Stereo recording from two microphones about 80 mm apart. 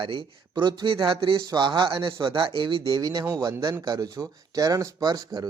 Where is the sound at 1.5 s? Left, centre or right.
Right.